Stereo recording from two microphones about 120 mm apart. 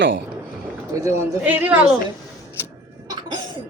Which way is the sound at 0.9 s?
25° right (ahead or behind).